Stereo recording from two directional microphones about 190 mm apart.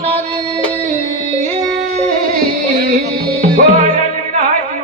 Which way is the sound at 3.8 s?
35° right (ahead or behind).